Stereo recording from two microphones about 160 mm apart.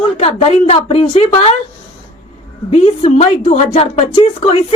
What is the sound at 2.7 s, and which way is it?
Speech, 40° left (ahead or behind).